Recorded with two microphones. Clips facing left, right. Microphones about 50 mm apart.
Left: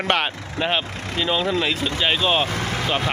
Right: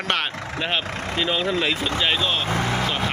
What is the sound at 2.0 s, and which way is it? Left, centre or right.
Speech, centre.